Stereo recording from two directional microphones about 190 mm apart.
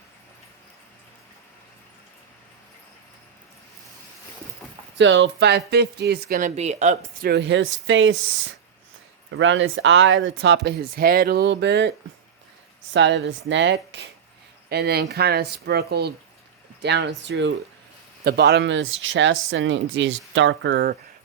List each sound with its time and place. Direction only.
4.9 s speech: 70° right (ahead or behind); by 6.5 s 50° right (ahead or behind)
6.6 s speech: 35° right (ahead or behind)
7.3 s speech: 65° right (ahead or behind); by 8.1 s 85° right
9.3 s speech: 80° right
14.7 s speech: 55° right (ahead or behind)